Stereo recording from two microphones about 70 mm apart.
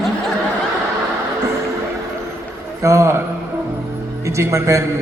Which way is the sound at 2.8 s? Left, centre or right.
Right.